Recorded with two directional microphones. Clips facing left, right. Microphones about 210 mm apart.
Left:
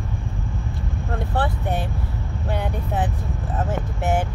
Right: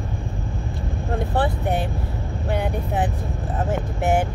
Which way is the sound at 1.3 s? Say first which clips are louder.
Right 2 dB; 15° right (ahead or behind).